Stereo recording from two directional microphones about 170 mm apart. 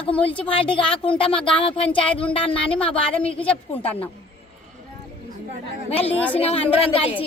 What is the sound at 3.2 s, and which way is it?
Speech, 5° left (ahead or behind).